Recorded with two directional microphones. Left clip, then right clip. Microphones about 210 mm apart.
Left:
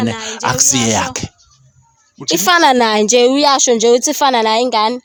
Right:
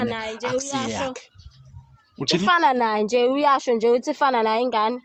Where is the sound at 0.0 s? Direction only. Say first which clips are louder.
Left 8 dB; 55° left (ahead or behind).